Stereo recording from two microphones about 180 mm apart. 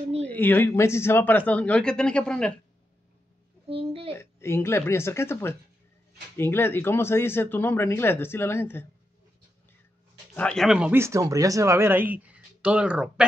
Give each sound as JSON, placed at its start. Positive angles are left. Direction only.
{"t": 0.3, "sound": "speech", "side_deg": 10}
{"t": 3.6, "sound": "speech", "side_deg": -30}
{"t": 4.1, "sound": "speech", "side_deg": 15}
{"t": 10.3, "sound": "speech", "side_deg": 5}